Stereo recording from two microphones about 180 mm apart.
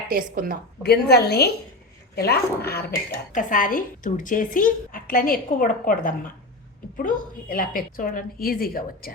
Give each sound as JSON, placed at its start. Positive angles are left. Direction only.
{"t": 0.1, "sound": "a woman's voice", "side_deg": -55}
{"t": 0.8, "sound": "a woman's voice", "side_deg": 60}
{"t": 3.3, "sound": "a woman's voice", "side_deg": 50}